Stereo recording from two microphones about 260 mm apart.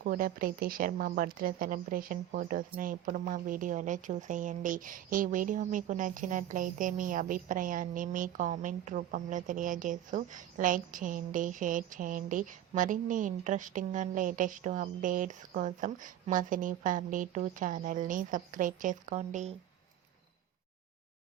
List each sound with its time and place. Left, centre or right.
0.0 s speech: right